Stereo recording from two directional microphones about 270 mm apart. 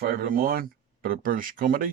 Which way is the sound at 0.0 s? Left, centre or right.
Right.